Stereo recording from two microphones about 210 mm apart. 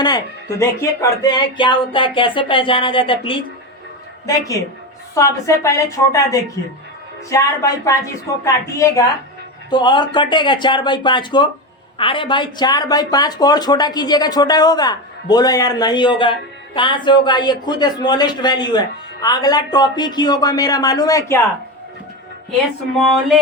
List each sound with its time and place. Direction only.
0.6 s a woman's voice: 15° left (ahead or behind)
7.3 s a woman's voice: 15° left (ahead or behind)